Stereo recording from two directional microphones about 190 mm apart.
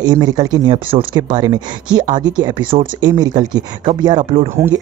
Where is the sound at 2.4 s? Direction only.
25° right (ahead or behind).